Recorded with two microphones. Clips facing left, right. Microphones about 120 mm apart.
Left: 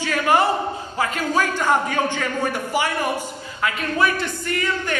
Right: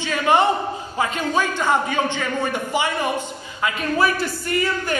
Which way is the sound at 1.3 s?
15° right (ahead or behind).